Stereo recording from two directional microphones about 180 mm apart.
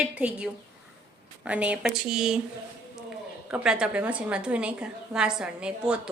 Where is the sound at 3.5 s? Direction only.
5° right (ahead or behind).